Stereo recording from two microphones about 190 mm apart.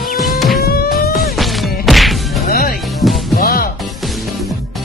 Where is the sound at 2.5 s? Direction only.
50° left (ahead or behind).